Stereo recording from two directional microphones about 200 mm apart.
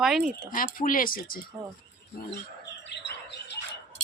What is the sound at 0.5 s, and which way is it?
Speech, 45° left (ahead or behind).